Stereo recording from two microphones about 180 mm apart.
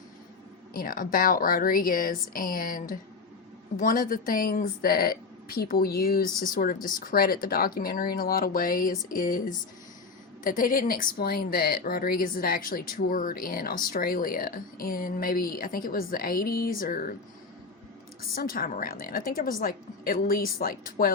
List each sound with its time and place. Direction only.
0.7 s speech: 50° left (ahead or behind)
18.3 s speech: 55° left (ahead or behind)